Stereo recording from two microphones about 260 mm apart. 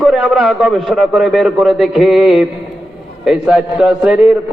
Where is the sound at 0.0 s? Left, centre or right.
Centre.